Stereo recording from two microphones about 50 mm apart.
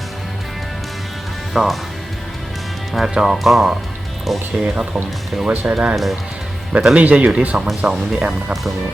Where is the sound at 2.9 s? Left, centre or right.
Centre.